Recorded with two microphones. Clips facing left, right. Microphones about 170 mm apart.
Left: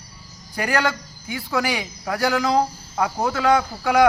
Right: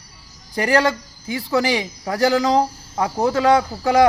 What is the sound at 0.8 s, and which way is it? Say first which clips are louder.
A man's voice: right 4 dB; 35° right (ahead or behind).